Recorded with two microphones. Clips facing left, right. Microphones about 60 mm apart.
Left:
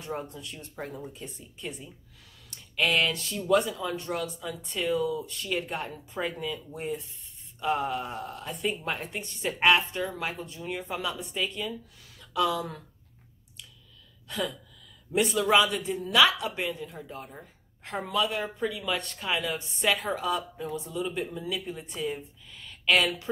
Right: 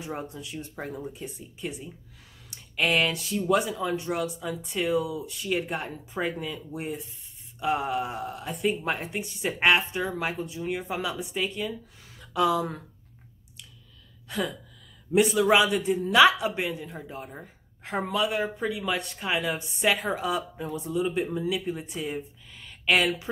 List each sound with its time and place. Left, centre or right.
0.0 s speech: centre
14.2 s speech: centre
16.0 s speech: right